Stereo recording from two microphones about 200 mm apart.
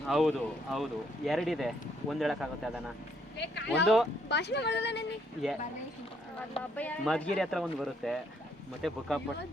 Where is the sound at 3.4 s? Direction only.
60° left (ahead or behind).